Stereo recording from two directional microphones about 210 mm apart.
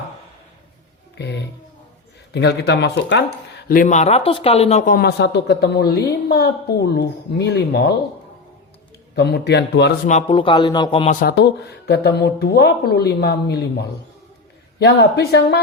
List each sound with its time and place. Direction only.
2.3 s speech: 55° left (ahead or behind)
3.7 s speech: 40° left (ahead or behind)
9.1 s speech: 50° left (ahead or behind)
10.1 s a man's voice: 30° left (ahead or behind)
11.1 s speech: 40° left (ahead or behind)
11.3 s speech: 55° left (ahead or behind)